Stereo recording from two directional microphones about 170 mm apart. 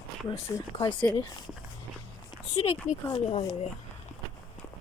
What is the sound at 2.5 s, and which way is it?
Speech, 35° left (ahead or behind).